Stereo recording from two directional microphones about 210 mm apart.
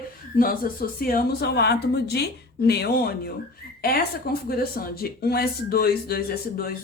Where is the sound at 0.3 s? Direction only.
45° left (ahead or behind).